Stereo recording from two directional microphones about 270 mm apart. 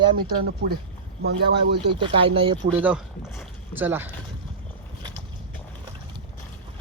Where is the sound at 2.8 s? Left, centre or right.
Centre.